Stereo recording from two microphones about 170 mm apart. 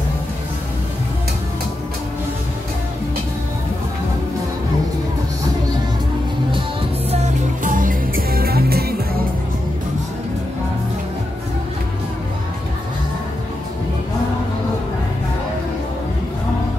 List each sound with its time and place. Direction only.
7.1 s music: 40° right (ahead or behind); by 8.9 s 65° right (ahead or behind)